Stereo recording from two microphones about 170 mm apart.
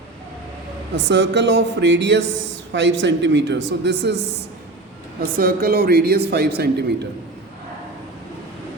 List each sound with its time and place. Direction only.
0.9 s speech: 90° right
5.4 s a man's voice: 60° right (ahead or behind)